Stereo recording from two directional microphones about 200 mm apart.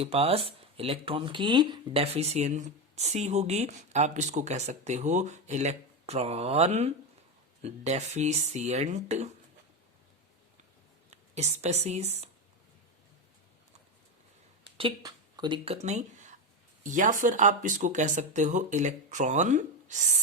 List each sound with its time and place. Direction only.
0.0 s speech: 30° right (ahead or behind)
11.1 s speech: 35° right (ahead or behind)
14.8 s speech: 25° right (ahead or behind); by 20.1 s 40° right (ahead or behind)